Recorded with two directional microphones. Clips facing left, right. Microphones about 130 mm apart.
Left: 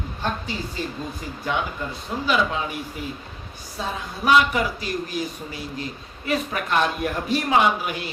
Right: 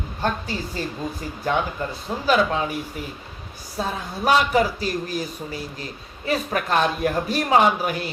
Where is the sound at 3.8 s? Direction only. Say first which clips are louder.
Right 2 dB; 40° right (ahead or behind).